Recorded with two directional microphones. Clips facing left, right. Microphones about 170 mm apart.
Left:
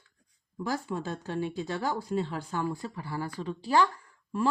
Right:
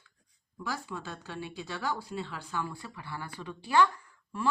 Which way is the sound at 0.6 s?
45° left (ahead or behind).